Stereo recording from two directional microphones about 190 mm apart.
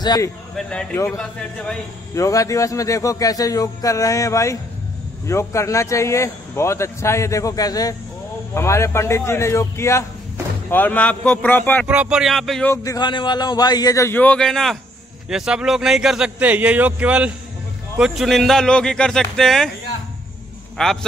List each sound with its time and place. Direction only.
0.0 s speech: 20° left (ahead or behind)
0.6 s a man's voice: 5° left (ahead or behind)
2.1 s a man's voice: 15° left (ahead or behind)
11.9 s a man's voice: 5° right (ahead or behind)
12.7 s a man's voice: 20° left (ahead or behind); by 19.7 s centre (ahead or behind)
20.7 s a man's voice: centre (ahead or behind)